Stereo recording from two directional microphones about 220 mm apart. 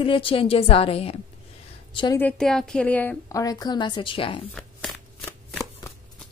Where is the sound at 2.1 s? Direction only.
5° left (ahead or behind); by 4.4 s 25° left (ahead or behind).